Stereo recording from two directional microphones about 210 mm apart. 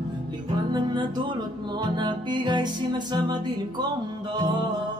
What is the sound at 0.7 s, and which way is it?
Music, 20° right (ahead or behind).